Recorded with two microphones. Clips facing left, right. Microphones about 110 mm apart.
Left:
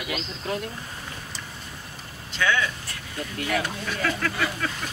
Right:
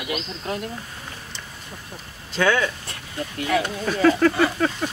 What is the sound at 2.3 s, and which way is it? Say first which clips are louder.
Speech: right 4 dB; 40° right (ahead or behind).